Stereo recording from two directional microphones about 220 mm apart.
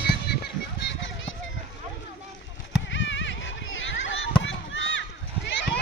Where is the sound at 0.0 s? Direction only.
45° left (ahead or behind).